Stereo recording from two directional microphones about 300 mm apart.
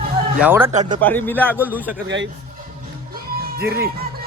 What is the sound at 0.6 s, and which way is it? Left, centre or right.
Speech, right.